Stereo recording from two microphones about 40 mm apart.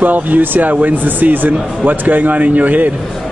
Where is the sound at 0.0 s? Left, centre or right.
Right.